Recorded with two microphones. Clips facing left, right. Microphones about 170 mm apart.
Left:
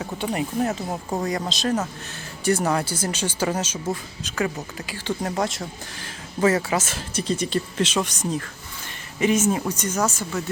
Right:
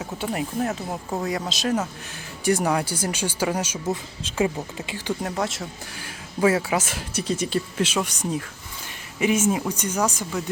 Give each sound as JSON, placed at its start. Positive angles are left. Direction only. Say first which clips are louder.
{"t": 0.3, "sound": "speech", "louder": "left 2 dB", "side_deg": 0}
{"t": 4.2, "sound": "speech", "louder": "right 4 dB", "side_deg": -25}
{"t": 5.2, "sound": "speech", "louder": "left 2 dB", "side_deg": 0}